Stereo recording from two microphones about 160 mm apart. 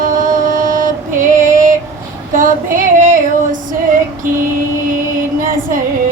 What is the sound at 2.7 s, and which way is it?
Female singing, 55° right (ahead or behind).